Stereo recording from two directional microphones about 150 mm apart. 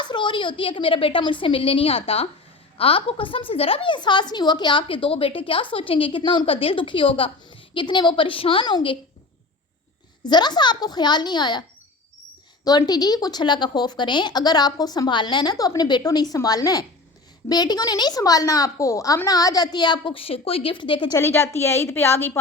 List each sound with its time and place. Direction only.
0.0 s a woman's voice: 30° left (ahead or behind)
10.2 s a woman's voice: 30° left (ahead or behind)
12.6 s a woman's voice: 25° left (ahead or behind)
21.2 s a woman's voice: 15° left (ahead or behind)